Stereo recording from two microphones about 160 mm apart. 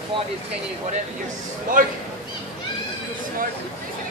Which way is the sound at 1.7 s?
55° right (ahead or behind).